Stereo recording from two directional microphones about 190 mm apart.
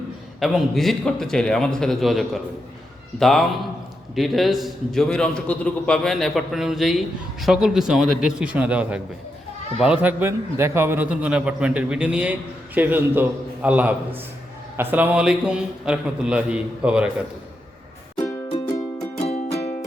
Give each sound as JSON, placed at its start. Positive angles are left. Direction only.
{"t": 0.3, "sound": "a man's voice", "side_deg": 0}
{"t": 18.4, "sound": "music", "side_deg": 20}
{"t": 19.2, "sound": "music", "side_deg": 35}